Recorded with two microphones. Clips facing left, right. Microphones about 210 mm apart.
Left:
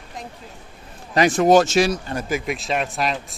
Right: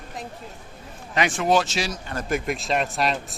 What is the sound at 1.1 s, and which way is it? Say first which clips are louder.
Speech: left 7 dB; 40° left (ahead or behind).